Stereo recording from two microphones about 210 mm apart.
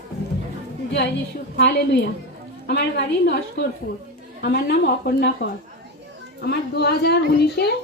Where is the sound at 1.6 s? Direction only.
55° left (ahead or behind).